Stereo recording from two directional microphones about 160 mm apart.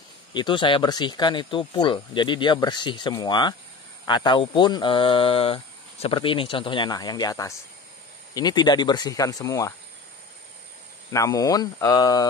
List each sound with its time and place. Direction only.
0.3 s speech: 30° left (ahead or behind)
11.1 s speech: 20° left (ahead or behind)